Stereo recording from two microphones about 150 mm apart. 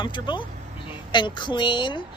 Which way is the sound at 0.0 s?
30° left (ahead or behind).